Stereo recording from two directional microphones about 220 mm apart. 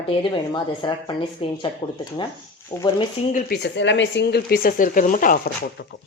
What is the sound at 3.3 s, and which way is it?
Speech, 50° left (ahead or behind).